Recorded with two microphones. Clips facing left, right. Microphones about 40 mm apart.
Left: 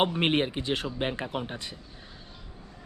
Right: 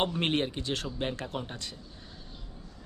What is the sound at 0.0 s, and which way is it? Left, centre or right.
A man's voice, left.